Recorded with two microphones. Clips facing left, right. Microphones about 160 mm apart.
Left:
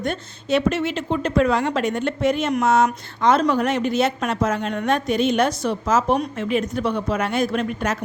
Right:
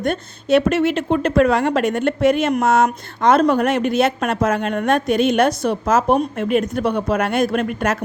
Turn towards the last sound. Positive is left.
turn(degrees=-60)  # may be behind; listen again after turning